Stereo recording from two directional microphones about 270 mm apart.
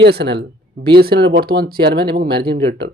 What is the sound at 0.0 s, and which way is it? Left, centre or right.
Speech, right.